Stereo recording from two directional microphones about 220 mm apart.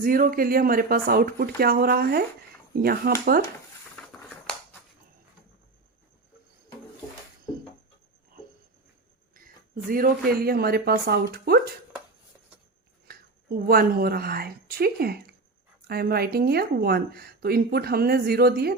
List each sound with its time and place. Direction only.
0.0 s speech: 40° right (ahead or behind)
9.9 s speech: 40° right (ahead or behind)
13.1 s a woman's voice: 45° right (ahead or behind)